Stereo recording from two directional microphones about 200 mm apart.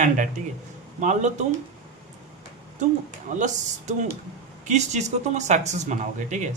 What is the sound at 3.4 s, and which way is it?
Speech, 35° right (ahead or behind).